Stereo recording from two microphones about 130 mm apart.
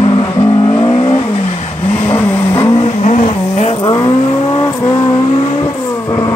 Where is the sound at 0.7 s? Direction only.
40° left (ahead or behind).